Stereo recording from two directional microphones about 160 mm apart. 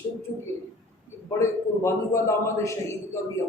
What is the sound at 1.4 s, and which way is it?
A man's voice, 15° left (ahead or behind).